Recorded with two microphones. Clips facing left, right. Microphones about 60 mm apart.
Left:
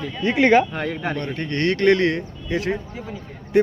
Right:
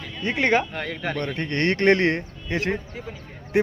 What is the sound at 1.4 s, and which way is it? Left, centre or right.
Speech, right.